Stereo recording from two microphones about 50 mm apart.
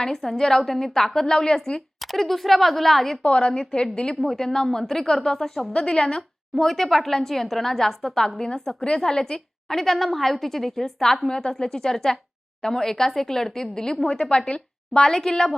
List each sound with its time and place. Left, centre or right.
0.0 s a woman's voice: centre
2.0 s speech: centre
3.2 s a woman's voice: centre
5.7 s a woman's voice: centre